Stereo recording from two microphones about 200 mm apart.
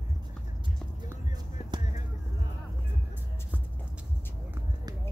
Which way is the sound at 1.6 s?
30° left (ahead or behind).